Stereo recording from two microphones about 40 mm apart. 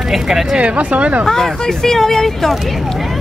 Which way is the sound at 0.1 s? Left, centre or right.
Centre.